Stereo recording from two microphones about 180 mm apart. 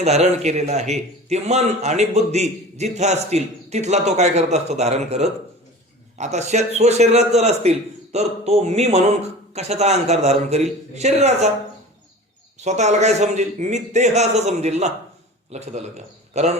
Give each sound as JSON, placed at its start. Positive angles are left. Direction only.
{"t": 0.0, "sound": "a man's voice", "side_deg": -35}
{"t": 12.5, "sound": "a man's voice", "side_deg": -40}